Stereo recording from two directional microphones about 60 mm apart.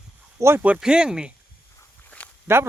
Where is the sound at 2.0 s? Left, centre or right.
Left.